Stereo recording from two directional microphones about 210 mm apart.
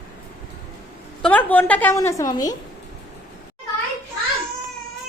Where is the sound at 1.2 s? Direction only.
5° left (ahead or behind).